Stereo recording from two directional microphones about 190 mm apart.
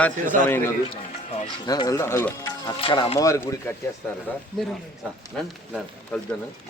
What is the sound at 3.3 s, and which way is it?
Speech, 15° left (ahead or behind).